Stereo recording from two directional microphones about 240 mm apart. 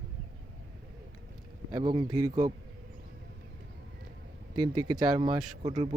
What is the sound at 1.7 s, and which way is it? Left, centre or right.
Speech, centre.